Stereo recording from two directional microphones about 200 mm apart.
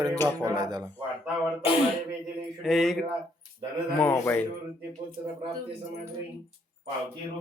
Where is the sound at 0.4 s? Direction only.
20° right (ahead or behind).